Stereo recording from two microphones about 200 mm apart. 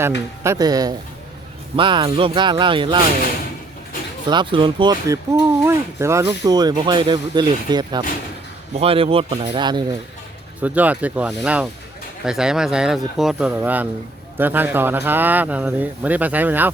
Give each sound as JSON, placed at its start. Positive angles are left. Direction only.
{"t": 0.4, "sound": "speech", "side_deg": -15}
{"t": 4.3, "sound": "speech", "side_deg": -25}
{"t": 10.6, "sound": "speech", "side_deg": -5}